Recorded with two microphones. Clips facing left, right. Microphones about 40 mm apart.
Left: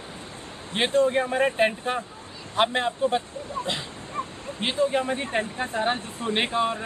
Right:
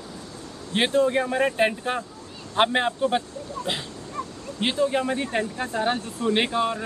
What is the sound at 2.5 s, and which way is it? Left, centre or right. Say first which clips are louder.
Speech: right 2 dB; centre.